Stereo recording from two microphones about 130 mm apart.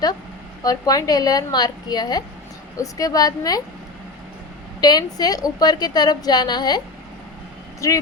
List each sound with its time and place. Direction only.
0.6 s a woman's voice: 30° left (ahead or behind)
4.8 s a woman's voice: 30° left (ahead or behind)
7.8 s a woman's voice: 25° left (ahead or behind)